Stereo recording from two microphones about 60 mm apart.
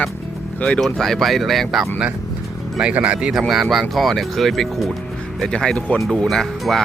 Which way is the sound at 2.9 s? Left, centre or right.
Right.